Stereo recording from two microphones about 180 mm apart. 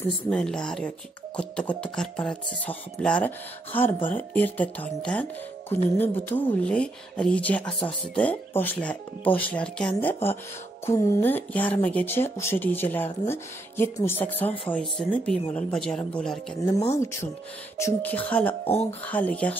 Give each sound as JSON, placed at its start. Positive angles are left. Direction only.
{"t": 0.3, "sound": "speech", "side_deg": 5}
{"t": 17.7, "sound": "speech", "side_deg": 10}
{"t": 18.7, "sound": "speech", "side_deg": 35}
{"t": 19.0, "sound": "speech", "side_deg": 10}